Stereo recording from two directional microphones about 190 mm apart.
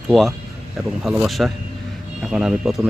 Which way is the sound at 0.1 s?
Centre (ahead or behind).